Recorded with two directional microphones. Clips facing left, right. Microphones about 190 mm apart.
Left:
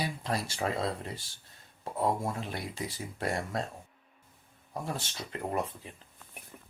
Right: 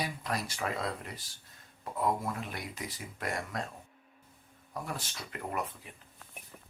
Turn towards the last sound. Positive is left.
turn(degrees=25)  # may be behind; listen again after turning